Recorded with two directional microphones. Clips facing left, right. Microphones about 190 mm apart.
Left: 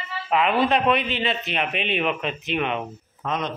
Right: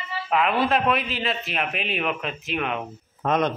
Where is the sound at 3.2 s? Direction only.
55° right (ahead or behind).